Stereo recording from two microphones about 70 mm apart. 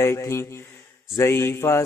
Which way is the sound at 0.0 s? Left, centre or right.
Left.